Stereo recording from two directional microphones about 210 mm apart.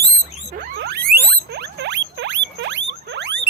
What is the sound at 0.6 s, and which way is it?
Rodents, 55° right (ahead or behind).